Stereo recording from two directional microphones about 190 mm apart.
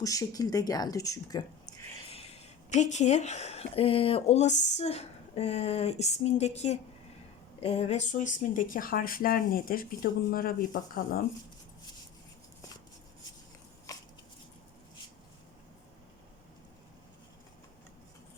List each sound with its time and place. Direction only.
0.0 s speech: 20° left (ahead or behind)
2.6 s speech: 40° left (ahead or behind)
13.9 s a sound: 15° left (ahead or behind)